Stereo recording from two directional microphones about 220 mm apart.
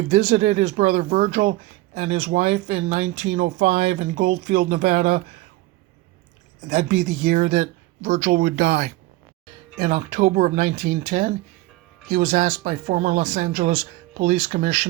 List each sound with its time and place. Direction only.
0.1 s speech: 30° right (ahead or behind)
6.7 s speech: 30° right (ahead or behind)